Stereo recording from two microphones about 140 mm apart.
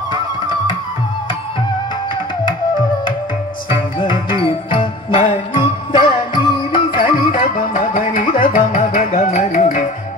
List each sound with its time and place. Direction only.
3.7 s music: 35° left (ahead or behind)
7.7 s music: 75° left (ahead or behind)